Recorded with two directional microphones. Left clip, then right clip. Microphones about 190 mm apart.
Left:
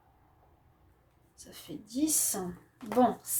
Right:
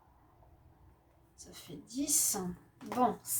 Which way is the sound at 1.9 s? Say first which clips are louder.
Left 3 dB; 45° left (ahead or behind).